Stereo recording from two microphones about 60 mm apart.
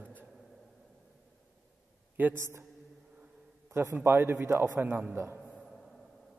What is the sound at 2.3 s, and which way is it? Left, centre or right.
Speech, right.